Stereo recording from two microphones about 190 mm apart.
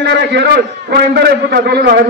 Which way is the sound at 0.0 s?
60° right (ahead or behind).